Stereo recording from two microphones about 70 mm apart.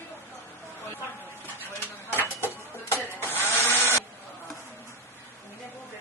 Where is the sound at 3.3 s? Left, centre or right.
Left.